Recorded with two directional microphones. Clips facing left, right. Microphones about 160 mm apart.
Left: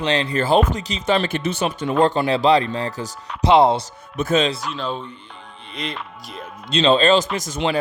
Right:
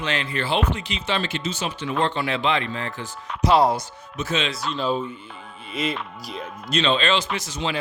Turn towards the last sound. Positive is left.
turn(degrees=45)  # may be behind; listen again after turning